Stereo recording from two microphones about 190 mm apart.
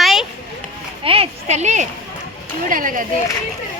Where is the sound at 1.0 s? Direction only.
30° right (ahead or behind); by 3.0 s 45° right (ahead or behind).